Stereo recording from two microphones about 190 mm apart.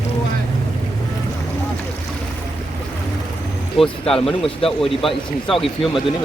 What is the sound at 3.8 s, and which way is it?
Speech, centre (ahead or behind).